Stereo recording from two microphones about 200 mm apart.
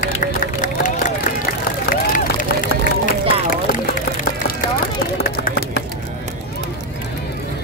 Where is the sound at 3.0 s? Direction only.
40° left (ahead or behind).